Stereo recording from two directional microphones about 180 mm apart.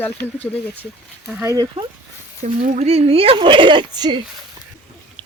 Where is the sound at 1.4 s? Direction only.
15° right (ahead or behind).